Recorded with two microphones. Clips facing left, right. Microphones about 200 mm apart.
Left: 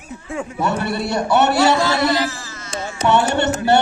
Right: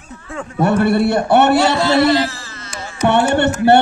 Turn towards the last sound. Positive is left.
turn(degrees=-60)  # may be behind; listen again after turning